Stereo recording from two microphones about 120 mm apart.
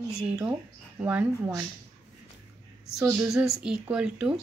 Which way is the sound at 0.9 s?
15° right (ahead or behind).